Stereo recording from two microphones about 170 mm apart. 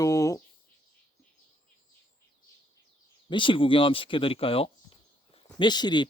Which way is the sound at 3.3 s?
30° left (ahead or behind).